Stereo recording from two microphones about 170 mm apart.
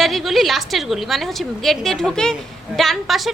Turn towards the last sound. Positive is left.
turn(degrees=0)  # may be behind; listen again after turning